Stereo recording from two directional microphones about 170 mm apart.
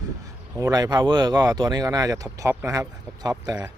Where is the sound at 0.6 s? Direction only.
20° right (ahead or behind).